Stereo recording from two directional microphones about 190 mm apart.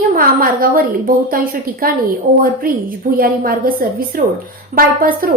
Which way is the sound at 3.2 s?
50° right (ahead or behind).